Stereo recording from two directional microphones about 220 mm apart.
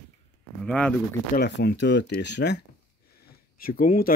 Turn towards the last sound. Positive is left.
turn(degrees=40)  # may be behind; listen again after turning